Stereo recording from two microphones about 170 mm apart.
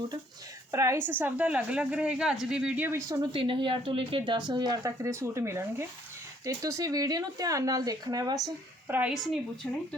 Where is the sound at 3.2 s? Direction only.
30° right (ahead or behind).